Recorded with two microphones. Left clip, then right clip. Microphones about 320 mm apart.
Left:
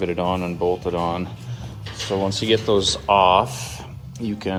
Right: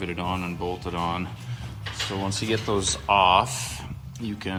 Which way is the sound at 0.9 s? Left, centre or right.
Centre.